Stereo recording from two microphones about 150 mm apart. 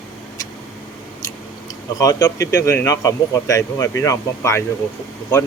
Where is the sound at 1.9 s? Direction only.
25° left (ahead or behind).